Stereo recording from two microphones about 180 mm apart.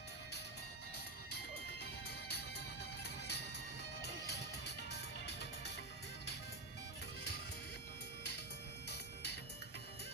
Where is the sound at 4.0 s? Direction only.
70° left (ahead or behind).